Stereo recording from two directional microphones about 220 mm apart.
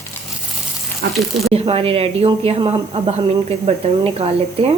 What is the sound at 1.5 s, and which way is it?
A woman's voice, 25° right (ahead or behind).